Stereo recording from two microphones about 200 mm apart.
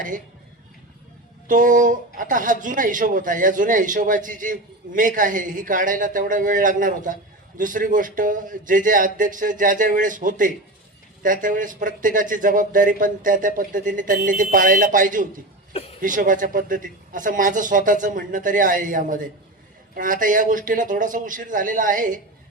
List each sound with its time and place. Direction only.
1.5 s speech: 40° right (ahead or behind)
15.7 s a sound: 30° left (ahead or behind)
16.0 s speech: 40° right (ahead or behind)